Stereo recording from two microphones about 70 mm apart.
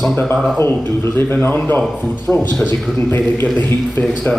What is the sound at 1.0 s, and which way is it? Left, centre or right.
Speech, left.